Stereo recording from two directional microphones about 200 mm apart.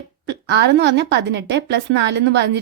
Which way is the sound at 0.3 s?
60° right (ahead or behind).